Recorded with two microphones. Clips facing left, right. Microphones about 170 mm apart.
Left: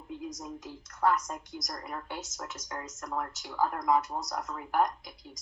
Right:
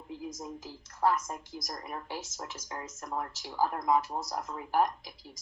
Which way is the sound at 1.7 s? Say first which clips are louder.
Even; 20° right (ahead or behind).